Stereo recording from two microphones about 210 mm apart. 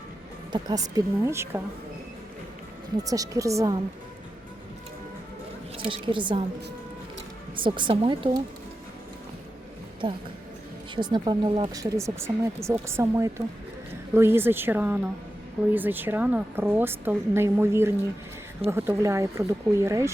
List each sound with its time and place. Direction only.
0.5 s speech: 15° right (ahead or behind)
3.0 s speech: 15° right (ahead or behind)
5.9 s a woman's voice: 25° right (ahead or behind)
7.5 s a woman's voice: 25° right (ahead or behind)
10.0 s a woman's voice: 25° right (ahead or behind)